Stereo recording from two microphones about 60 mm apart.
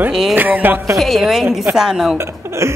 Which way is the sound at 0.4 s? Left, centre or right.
Right.